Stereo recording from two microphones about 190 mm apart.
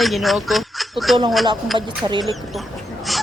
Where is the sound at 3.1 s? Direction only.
Centre (ahead or behind).